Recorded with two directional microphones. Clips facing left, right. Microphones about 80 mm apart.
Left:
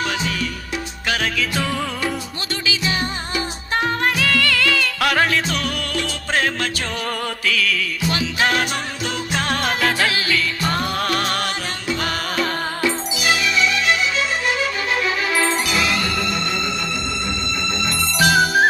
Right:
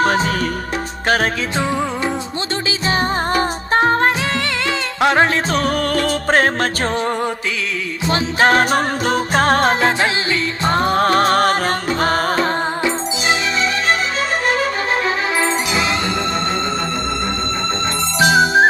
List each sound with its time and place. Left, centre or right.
1.0 s music: right
3.3 s music: right
8.1 s music: right
15.4 s music: right
18.2 s music: right